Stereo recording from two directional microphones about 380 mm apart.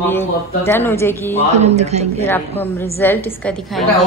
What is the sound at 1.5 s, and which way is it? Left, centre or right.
Speech, centre.